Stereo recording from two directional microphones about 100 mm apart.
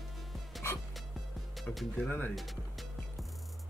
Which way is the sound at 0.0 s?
Centre (ahead or behind).